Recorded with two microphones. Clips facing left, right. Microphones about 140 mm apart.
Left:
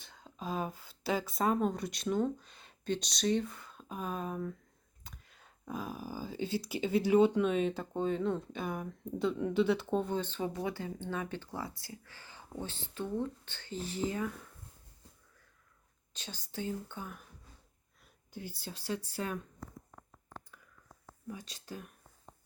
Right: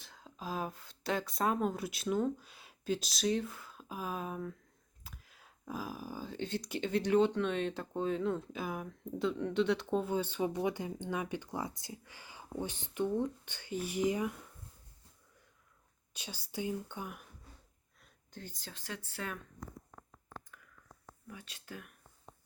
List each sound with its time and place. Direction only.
0.0 s speech: centre (ahead or behind)
16.1 s speech: 10° right (ahead or behind)
18.0 s whispering: 10° left (ahead or behind)
19.2 s speech: 25° left (ahead or behind)
21.2 s speech: 35° left (ahead or behind)